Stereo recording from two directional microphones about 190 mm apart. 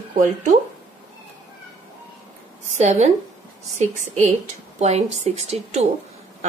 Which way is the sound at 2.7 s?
35° right (ahead or behind).